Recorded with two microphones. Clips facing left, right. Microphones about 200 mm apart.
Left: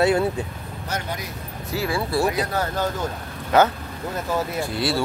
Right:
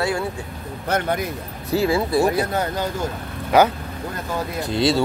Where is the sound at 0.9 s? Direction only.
55° right (ahead or behind).